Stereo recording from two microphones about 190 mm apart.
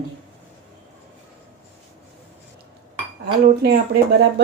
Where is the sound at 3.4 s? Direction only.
55° right (ahead or behind).